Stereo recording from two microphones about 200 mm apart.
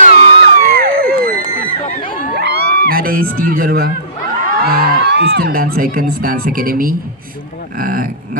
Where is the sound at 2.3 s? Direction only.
55° right (ahead or behind).